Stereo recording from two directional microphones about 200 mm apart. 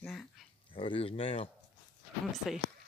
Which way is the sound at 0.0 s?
5° left (ahead or behind).